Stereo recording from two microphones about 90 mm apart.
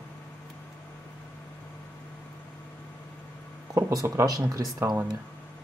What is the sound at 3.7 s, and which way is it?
Speech, 35° right (ahead or behind).